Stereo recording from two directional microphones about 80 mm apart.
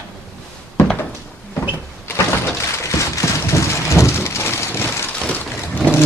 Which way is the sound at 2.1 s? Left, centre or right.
Left.